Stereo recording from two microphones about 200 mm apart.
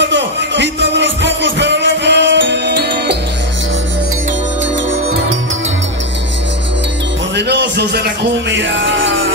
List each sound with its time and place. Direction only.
0.0 s music: 65° right (ahead or behind)
7.3 s music: 55° right (ahead or behind)